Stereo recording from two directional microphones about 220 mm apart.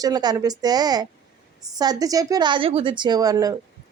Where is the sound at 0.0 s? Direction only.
20° right (ahead or behind).